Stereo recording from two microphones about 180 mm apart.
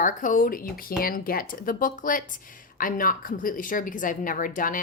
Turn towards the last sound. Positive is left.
turn(degrees=50)  # may be behind; listen again after turning